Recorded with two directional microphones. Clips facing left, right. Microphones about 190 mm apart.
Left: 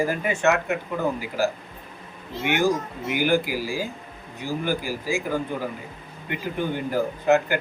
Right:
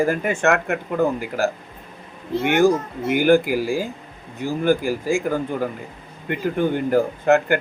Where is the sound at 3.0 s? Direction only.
50° right (ahead or behind).